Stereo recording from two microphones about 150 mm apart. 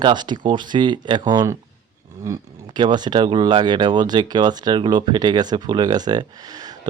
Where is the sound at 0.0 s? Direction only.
30° right (ahead or behind).